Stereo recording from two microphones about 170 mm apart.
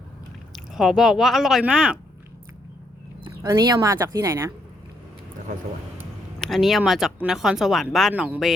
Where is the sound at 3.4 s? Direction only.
25° right (ahead or behind).